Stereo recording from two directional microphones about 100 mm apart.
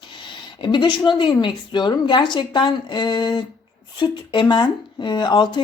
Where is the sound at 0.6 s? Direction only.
50° left (ahead or behind).